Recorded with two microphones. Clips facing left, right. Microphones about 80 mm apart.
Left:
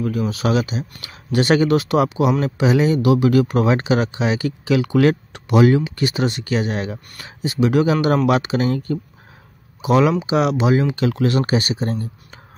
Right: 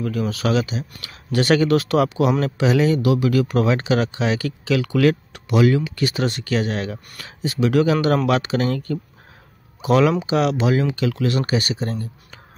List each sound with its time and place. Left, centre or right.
0.0 s speech: centre
3.0 s speech: left
9.8 s speech: centre
11.0 s speech: left